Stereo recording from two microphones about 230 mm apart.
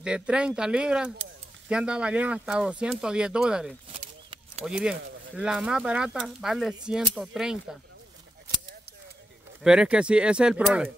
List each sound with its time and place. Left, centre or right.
0.0 s speech: centre
3.9 s a sound: right
4.6 s speech: centre
9.6 s speech: centre